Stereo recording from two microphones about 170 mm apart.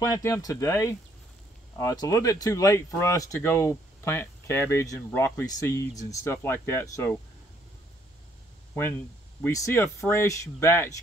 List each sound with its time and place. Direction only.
0.0 s speech: 15° left (ahead or behind)
9.4 s speech: 15° left (ahead or behind)